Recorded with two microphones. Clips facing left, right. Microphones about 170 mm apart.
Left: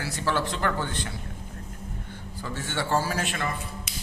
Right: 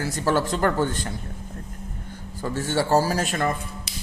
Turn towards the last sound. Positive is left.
turn(degrees=-45)  # may be behind; listen again after turning